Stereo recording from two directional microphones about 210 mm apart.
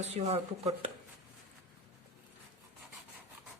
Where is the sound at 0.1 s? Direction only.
30° right (ahead or behind).